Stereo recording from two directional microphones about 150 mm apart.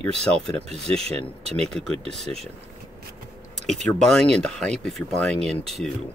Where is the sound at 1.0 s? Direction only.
45° right (ahead or behind).